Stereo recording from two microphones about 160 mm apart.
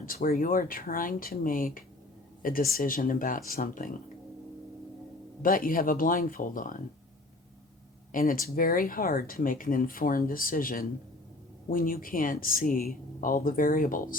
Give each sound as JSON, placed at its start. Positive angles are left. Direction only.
{"t": 0.0, "sound": "speech", "side_deg": 60}
{"t": 5.4, "sound": "speech", "side_deg": 60}
{"t": 8.1, "sound": "speech", "side_deg": 60}